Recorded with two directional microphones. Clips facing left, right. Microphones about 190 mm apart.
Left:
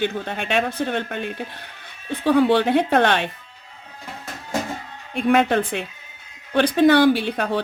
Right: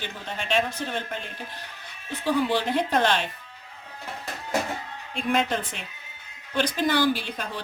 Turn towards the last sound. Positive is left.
turn(degrees=65)  # may be behind; listen again after turning